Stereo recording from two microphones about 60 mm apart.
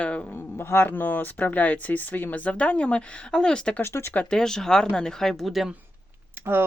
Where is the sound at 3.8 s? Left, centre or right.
Left.